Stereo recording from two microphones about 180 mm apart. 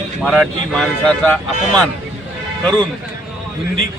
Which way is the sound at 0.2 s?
5° left (ahead or behind).